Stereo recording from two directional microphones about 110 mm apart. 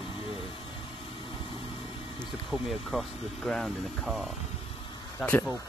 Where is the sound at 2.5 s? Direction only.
Centre (ahead or behind).